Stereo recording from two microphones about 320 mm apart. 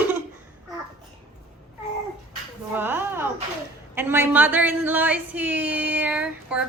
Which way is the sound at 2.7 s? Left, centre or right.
Centre.